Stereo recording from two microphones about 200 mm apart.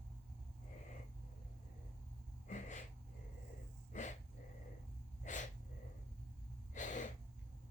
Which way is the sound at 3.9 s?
40° left (ahead or behind).